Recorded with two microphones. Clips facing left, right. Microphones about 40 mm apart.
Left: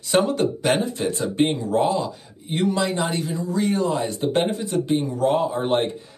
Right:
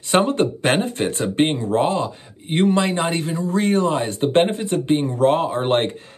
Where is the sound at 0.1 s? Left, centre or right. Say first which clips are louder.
Right 2 dB; right.